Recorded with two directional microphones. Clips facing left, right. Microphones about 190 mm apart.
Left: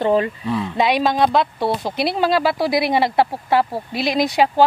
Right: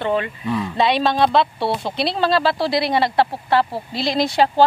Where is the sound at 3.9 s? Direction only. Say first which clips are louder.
Left 2 dB; 30° right (ahead or behind).